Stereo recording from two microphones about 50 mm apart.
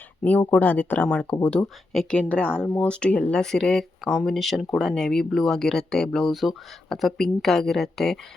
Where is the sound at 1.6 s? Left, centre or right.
Centre.